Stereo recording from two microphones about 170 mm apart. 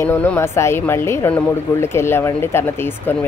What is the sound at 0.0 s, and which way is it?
Speech, 10° left (ahead or behind).